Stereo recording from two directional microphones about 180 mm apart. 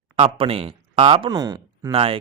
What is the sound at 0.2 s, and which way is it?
Speech, 30° right (ahead or behind).